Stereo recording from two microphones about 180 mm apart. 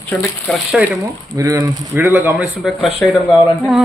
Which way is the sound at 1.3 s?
20° right (ahead or behind).